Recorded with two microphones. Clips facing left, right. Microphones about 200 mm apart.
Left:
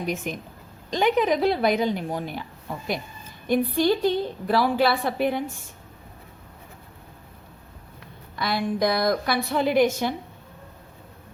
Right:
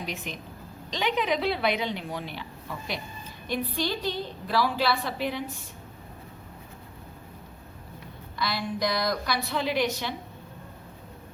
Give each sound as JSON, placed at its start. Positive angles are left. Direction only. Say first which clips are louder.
{"t": 0.0, "sound": "a woman's voice", "louder": "left 7 dB", "side_deg": 50}
{"t": 8.4, "sound": "a woman's voice", "louder": "left 5 dB", "side_deg": 55}